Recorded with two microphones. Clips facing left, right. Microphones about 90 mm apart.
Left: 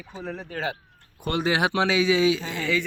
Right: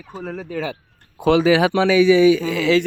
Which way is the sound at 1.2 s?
90° right.